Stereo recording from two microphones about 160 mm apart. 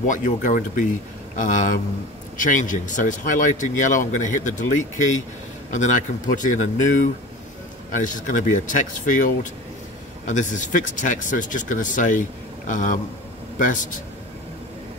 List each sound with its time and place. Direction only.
0.0 s speech: 55° left (ahead or behind)
5.7 s speech: 50° left (ahead or behind)